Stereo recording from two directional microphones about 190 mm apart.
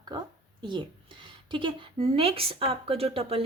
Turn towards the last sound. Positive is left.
turn(degrees=-30)  # may be behind; listen again after turning